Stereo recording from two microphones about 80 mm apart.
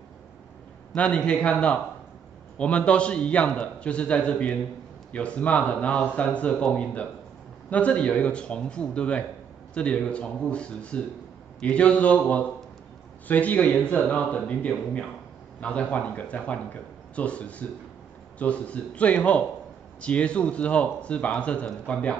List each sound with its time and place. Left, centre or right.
0.9 s speech: centre